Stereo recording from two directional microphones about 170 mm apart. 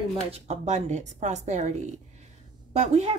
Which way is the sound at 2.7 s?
40° right (ahead or behind).